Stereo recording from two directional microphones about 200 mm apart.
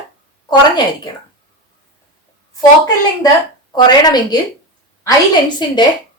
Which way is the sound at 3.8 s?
20° left (ahead or behind).